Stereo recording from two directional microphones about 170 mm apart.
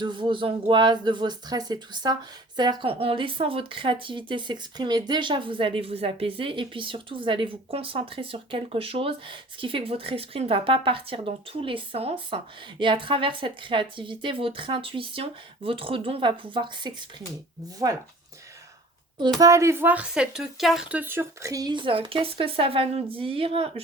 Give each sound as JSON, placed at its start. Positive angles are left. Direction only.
{"t": 0.0, "sound": "speech", "side_deg": -25}
{"t": 19.4, "sound": "speech", "side_deg": -20}